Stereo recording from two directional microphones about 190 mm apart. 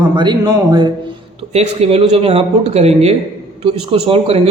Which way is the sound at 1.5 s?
35° right (ahead or behind).